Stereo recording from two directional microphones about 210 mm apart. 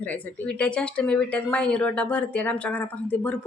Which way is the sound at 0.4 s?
5° left (ahead or behind).